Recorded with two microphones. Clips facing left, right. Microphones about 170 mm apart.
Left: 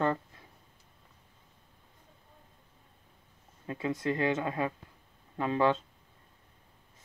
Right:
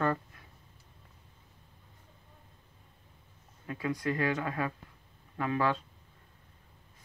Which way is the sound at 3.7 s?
25° left (ahead or behind).